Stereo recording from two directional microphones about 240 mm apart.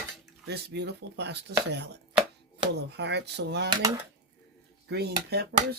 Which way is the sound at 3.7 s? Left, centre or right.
Centre.